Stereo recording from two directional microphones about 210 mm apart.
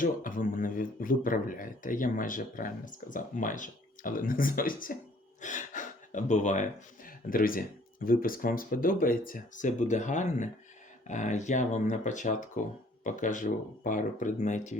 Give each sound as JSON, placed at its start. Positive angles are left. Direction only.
{"t": 0.0, "sound": "speech", "side_deg": 40}